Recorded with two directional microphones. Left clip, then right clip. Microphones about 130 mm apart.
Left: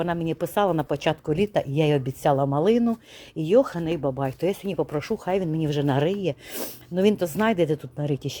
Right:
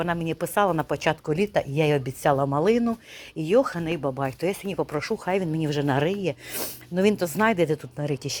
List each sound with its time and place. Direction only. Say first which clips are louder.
0.0 s speech: left 1 dB; 45° left (ahead or behind)